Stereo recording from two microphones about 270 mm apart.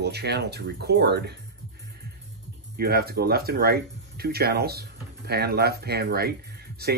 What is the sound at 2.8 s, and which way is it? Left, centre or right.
A man's voice, right.